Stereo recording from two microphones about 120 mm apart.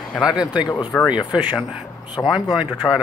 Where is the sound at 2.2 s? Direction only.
20° left (ahead or behind).